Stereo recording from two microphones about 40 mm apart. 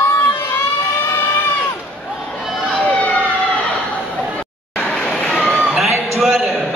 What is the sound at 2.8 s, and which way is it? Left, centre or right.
Emergency vehicle, left.